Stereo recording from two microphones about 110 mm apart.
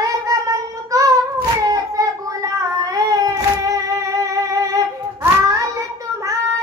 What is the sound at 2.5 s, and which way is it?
Child singing, 30° right (ahead or behind).